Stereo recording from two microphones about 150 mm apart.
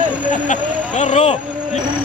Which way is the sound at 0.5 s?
50° left (ahead or behind).